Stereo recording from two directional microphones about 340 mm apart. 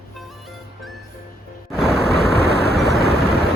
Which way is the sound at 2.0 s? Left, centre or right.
Left.